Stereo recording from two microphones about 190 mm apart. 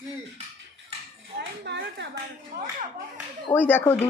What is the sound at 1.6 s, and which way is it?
Speech, 65° right (ahead or behind).